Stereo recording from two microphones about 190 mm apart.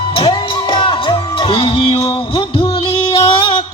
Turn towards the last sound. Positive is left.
turn(degrees=25)  # may be behind; listen again after turning